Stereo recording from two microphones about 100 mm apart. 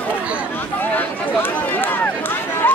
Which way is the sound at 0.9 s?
20° left (ahead or behind).